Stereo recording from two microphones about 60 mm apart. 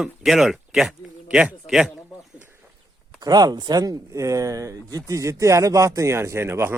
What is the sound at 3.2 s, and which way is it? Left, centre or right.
Speech, right.